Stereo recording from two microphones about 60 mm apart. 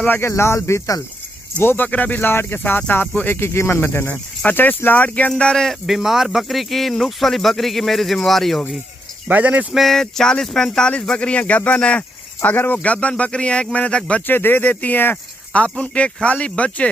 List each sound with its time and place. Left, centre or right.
0.3 s speech: left
1.6 s speech: left
5.4 s speech: centre
5.9 s speech: centre
9.3 s speech: right
9.8 s speech: centre
12.4 s speech: left
14.2 s speech: left
15.8 s speech: centre